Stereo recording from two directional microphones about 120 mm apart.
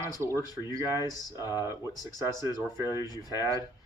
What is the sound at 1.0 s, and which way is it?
Speech, 30° left (ahead or behind).